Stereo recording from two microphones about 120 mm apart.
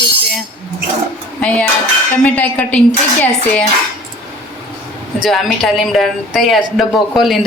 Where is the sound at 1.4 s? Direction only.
10° left (ahead or behind).